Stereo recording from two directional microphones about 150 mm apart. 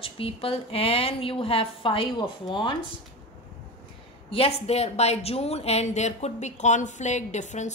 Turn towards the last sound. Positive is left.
turn(degrees=50)  # may be behind; listen again after turning